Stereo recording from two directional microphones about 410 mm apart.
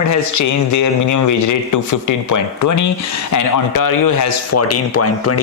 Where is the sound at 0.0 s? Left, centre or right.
Left.